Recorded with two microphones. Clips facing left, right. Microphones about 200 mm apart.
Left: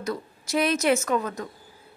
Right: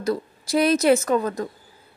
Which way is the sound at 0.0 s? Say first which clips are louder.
Right 6 dB; 35° right (ahead or behind).